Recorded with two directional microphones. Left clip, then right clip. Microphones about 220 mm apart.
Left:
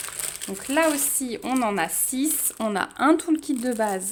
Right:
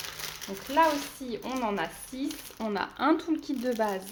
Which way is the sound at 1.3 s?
55° left (ahead or behind).